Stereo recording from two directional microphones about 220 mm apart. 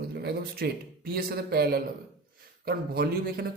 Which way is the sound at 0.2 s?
45° right (ahead or behind).